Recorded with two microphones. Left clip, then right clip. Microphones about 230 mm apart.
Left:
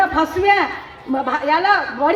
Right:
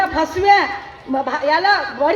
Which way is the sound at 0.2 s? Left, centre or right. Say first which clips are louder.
Right 2 dB; right.